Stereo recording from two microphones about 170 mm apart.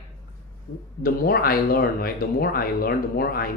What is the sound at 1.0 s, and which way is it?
Speech, 60° left (ahead or behind).